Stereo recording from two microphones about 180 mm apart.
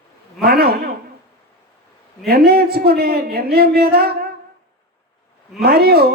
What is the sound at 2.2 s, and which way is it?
Speech, 60° right (ahead or behind).